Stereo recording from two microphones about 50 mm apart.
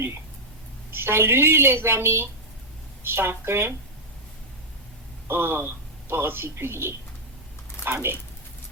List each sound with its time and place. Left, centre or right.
0.9 s a woman's voice: right
5.3 s a woman's voice: right